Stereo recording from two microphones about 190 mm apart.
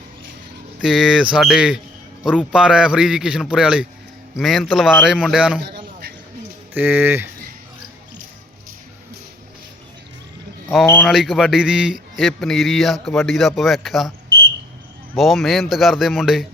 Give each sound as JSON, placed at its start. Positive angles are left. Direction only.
{"t": 0.8, "sound": "speech", "side_deg": 0}
{"t": 5.5, "sound": "a sound", "side_deg": -55}
{"t": 6.7, "sound": "speech", "side_deg": -10}
{"t": 10.8, "sound": "speech", "side_deg": 5}
{"t": 15.1, "sound": "speech", "side_deg": 0}